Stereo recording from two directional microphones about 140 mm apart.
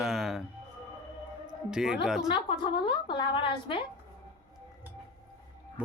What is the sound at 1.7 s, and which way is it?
Speech, 5° right (ahead or behind).